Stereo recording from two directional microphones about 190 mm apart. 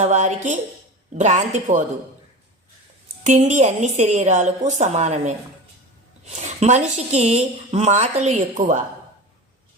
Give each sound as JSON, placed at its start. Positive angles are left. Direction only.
{"t": 0.0, "sound": "a woman's voice", "side_deg": -40}
{"t": 3.2, "sound": "a woman's voice", "side_deg": -40}